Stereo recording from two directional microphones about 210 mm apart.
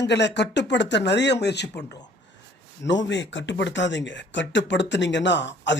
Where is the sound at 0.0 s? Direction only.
55° left (ahead or behind).